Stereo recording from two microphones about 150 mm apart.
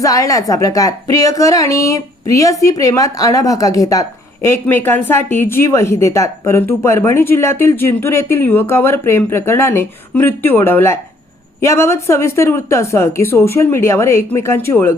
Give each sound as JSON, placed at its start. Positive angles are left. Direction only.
{"t": 0.0, "sound": "a woman's voice", "side_deg": 20}